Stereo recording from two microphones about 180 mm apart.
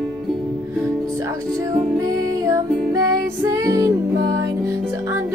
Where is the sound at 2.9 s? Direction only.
20° right (ahead or behind).